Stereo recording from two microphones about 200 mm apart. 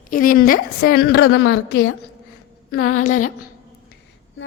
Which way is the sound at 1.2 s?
70° left (ahead or behind).